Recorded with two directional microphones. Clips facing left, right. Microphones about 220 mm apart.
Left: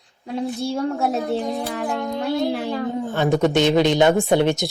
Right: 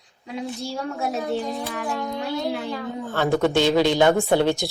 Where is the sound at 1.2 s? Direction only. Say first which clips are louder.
Left 3 dB; 65° left (ahead or behind).